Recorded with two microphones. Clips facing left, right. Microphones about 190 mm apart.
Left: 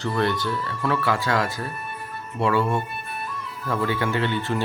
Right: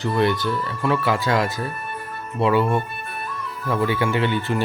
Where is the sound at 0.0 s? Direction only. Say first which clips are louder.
Right 3 dB; 15° right (ahead or behind).